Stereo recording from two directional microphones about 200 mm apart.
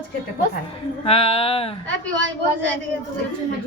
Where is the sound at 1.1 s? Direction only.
30° left (ahead or behind).